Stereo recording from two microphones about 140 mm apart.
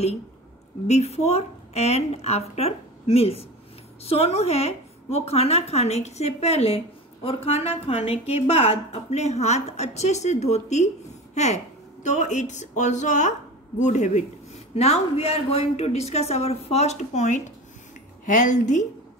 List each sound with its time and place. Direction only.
0.8 s a woman's voice: 50° left (ahead or behind)